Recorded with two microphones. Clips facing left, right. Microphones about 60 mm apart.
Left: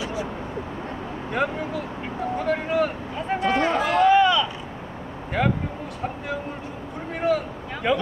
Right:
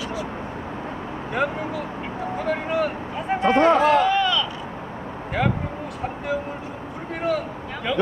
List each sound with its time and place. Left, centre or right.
1.3 s speech: centre
3.4 s speech: right
4.0 s a sound: centre
5.4 s speech: centre
7.9 s speech: centre